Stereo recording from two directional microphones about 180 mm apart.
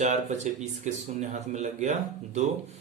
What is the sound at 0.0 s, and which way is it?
A man's voice, 40° right (ahead or behind).